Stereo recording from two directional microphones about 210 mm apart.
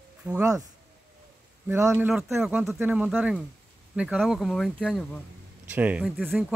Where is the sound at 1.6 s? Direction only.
10° right (ahead or behind).